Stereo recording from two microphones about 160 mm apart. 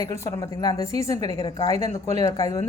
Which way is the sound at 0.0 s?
20° left (ahead or behind).